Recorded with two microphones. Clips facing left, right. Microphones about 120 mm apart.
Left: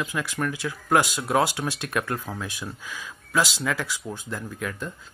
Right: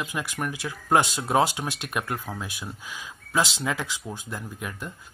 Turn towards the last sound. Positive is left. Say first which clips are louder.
# left 3 dB
turn(degrees=-15)  # may be behind; listen again after turning